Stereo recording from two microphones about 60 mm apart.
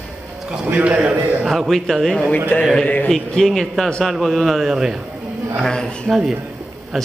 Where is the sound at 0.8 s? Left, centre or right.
Right.